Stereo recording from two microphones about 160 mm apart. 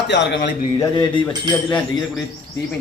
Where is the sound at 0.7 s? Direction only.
30° left (ahead or behind).